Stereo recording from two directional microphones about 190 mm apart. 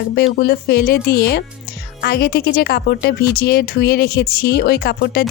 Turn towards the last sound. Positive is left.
turn(degrees=55)  # may be behind; listen again after turning